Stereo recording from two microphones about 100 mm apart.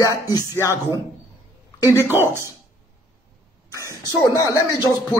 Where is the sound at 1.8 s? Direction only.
30° left (ahead or behind).